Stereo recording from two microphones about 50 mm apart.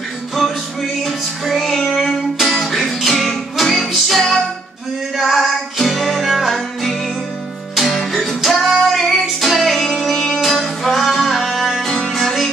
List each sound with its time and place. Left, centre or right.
1.0 s music: centre